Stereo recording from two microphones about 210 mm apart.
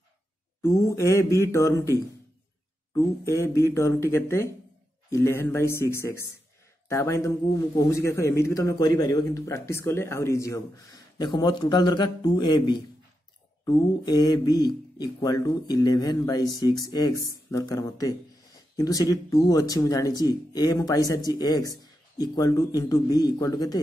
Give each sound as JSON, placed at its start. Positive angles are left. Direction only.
{"t": 0.6, "sound": "a man's voice", "side_deg": 15}